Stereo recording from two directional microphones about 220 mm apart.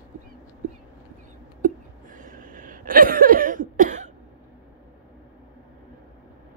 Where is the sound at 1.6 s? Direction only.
35° right (ahead or behind).